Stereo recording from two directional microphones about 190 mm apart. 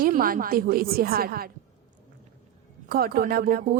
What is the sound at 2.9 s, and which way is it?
Speech, 50° right (ahead or behind).